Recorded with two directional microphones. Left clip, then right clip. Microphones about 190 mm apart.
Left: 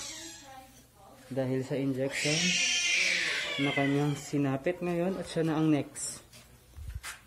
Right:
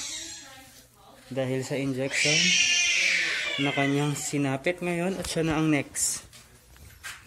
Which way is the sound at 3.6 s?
10° right (ahead or behind).